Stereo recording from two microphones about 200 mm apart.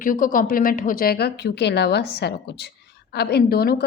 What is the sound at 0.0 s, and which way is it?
A woman's voice, 45° left (ahead or behind).